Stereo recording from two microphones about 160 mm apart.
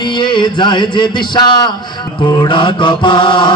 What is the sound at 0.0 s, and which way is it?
Music, 30° left (ahead or behind).